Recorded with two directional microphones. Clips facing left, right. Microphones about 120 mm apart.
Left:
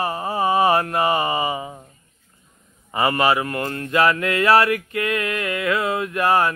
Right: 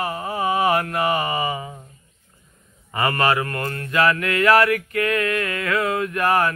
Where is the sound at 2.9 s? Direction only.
20° left (ahead or behind).